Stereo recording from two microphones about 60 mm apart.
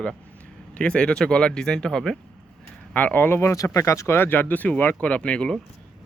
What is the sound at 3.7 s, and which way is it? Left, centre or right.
Speech, left.